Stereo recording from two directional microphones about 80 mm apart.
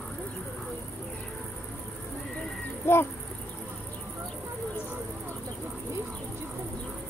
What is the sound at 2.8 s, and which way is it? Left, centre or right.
Insect, left.